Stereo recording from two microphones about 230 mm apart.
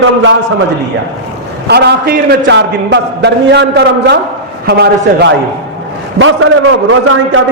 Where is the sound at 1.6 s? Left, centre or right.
Right.